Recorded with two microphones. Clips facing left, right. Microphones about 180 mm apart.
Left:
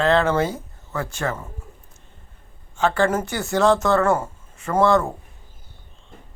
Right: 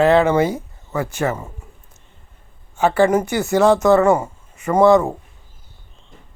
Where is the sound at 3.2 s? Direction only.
Centre (ahead or behind).